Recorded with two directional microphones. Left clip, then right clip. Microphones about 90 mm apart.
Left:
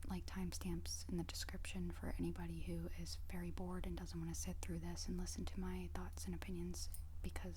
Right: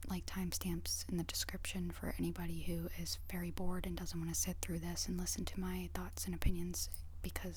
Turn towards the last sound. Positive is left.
turn(degrees=-35)  # may be behind; listen again after turning